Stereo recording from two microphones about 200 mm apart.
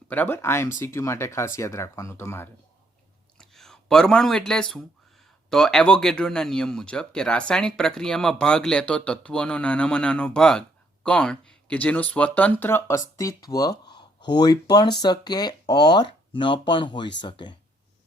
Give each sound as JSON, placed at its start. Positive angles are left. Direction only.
{"t": 0.1, "sound": "speech", "side_deg": 10}
{"t": 3.3, "sound": "speech", "side_deg": 0}